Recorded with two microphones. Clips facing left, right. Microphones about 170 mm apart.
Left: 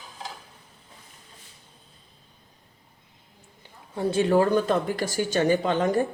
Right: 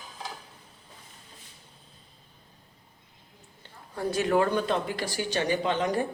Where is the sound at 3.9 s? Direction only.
25° left (ahead or behind); by 5.9 s 45° left (ahead or behind).